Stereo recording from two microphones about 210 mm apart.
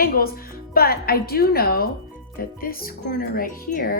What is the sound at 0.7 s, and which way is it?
Speech, 45° left (ahead or behind).